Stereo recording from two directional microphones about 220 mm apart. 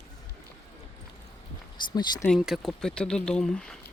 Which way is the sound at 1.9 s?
20° left (ahead or behind).